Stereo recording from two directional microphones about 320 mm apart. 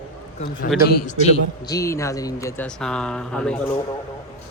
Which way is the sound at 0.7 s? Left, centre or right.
Left.